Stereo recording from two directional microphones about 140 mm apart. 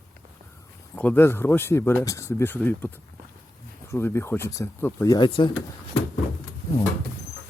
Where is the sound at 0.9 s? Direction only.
15° left (ahead or behind).